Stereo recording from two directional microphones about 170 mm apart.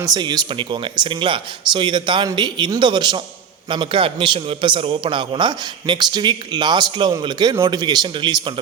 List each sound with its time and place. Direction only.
0.0 s a man's voice: 25° right (ahead or behind)